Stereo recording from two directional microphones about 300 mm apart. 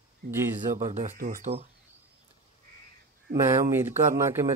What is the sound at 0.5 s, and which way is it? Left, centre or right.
Speech, right.